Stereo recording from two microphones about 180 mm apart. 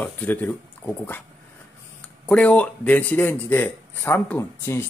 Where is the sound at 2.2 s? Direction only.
5° left (ahead or behind).